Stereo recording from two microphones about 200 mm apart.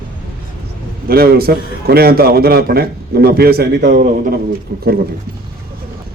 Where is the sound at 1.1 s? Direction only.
50° right (ahead or behind).